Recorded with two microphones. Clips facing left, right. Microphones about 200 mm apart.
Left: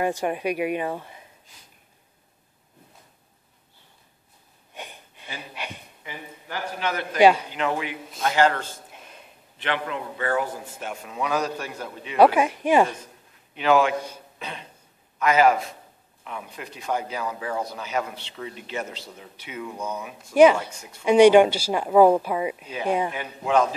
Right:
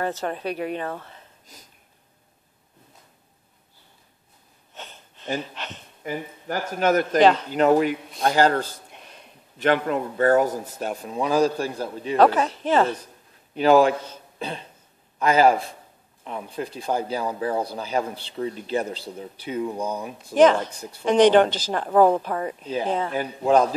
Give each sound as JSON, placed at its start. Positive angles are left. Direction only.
{"t": 0.0, "sound": "speech", "side_deg": 15}
{"t": 4.7, "sound": "a sound", "side_deg": 15}
{"t": 5.4, "sound": "speech", "side_deg": 10}
{"t": 6.0, "sound": "a man's voice", "side_deg": -45}
{"t": 7.2, "sound": "speech", "side_deg": 10}
{"t": 7.5, "sound": "a man's voice", "side_deg": -40}
{"t": 8.9, "sound": "a sound", "side_deg": 5}
{"t": 9.6, "sound": "speech", "side_deg": -45}
{"t": 12.2, "sound": "speech", "side_deg": 10}
{"t": 13.6, "sound": "speech", "side_deg": -35}
{"t": 20.3, "sound": "speech", "side_deg": 10}
{"t": 20.7, "sound": "speech", "side_deg": -35}
{"t": 21.0, "sound": "speech", "side_deg": 10}
{"t": 23.1, "sound": "speech", "side_deg": -35}